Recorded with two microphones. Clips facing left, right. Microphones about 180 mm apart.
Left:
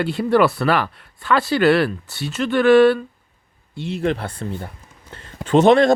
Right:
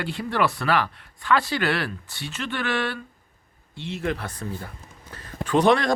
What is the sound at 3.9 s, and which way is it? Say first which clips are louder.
Speech: left 6 dB; 30° left (ahead or behind).